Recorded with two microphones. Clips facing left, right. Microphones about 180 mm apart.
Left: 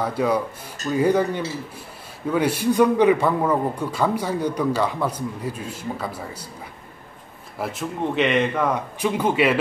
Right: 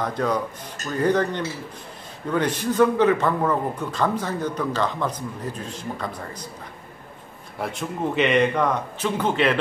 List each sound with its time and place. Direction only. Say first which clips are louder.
0.0 s a man's voice: left 2 dB; 10° left (ahead or behind)
7.5 s a man's voice: left 1 dB; 5° left (ahead or behind)